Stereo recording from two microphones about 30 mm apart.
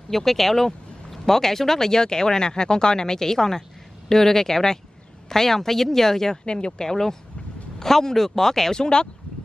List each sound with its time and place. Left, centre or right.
0.1 s speech: centre
6.4 s speech: left; by 8.7 s centre
8.7 s speech: left